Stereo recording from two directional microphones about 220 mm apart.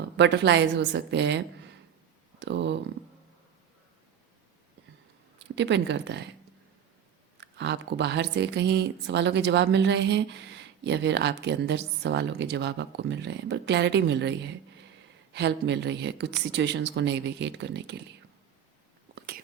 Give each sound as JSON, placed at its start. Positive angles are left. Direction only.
{"t": 0.0, "sound": "speech", "side_deg": -50}
{"t": 5.5, "sound": "speech", "side_deg": -55}
{"t": 7.3, "sound": "speech", "side_deg": -50}
{"t": 19.1, "sound": "whispering", "side_deg": -45}